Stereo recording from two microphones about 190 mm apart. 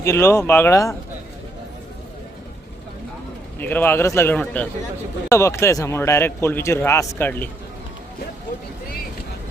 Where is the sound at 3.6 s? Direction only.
10° left (ahead or behind).